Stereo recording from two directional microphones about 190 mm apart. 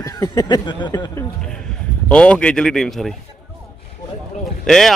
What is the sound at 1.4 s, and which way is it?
A man's voice, 5° left (ahead or behind).